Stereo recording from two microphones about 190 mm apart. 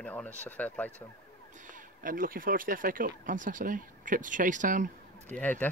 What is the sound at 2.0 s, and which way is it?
Speech, 45° right (ahead or behind).